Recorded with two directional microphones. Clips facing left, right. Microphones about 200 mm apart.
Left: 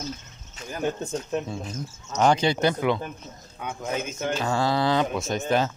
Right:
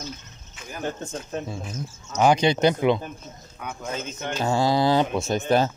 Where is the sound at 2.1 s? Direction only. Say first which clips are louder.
Right 2 dB; 10° right (ahead or behind).